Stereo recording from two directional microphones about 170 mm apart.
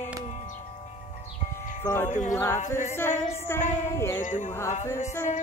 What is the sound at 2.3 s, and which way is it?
Mantra, 15° left (ahead or behind).